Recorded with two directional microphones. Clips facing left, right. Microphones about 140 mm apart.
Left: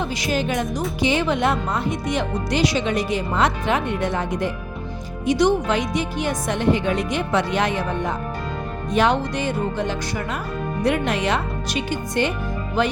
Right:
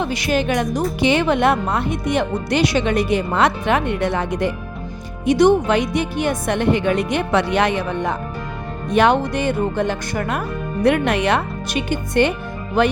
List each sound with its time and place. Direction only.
0.0 s a woman's voice: 65° right (ahead or behind)
5.2 s speech: 55° right (ahead or behind)